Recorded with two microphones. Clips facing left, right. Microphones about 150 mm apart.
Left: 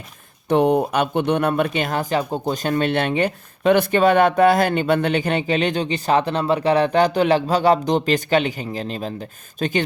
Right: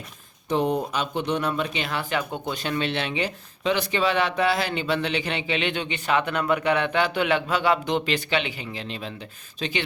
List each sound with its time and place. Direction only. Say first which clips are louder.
0.4 s speech: left 7 dB; 60° left (ahead or behind)